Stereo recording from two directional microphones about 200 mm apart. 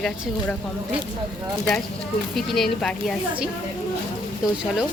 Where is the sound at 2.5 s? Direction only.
Centre (ahead or behind).